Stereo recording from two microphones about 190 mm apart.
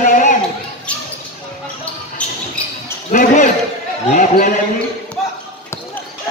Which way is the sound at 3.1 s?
45° left (ahead or behind).